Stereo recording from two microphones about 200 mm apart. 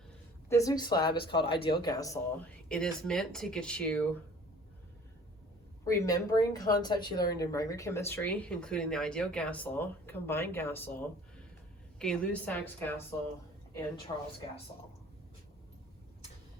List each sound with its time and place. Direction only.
0.4 s speech: 15° left (ahead or behind)
2.6 s speech: 5° left (ahead or behind)
5.8 s speech: 15° left (ahead or behind)
14.1 s speech: 25° left (ahead or behind)